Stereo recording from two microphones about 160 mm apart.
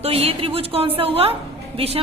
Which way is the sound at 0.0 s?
40° right (ahead or behind).